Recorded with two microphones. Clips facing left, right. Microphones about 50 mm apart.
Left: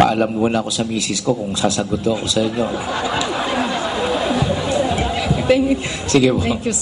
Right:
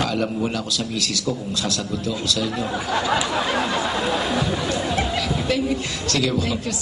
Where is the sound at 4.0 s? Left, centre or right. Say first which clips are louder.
Left 3 dB; left.